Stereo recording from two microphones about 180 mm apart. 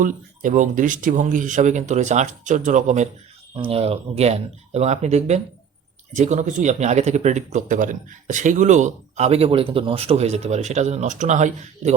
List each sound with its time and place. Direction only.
0.0 s speech: 45° right (ahead or behind)
3.5 s speech: 30° right (ahead or behind)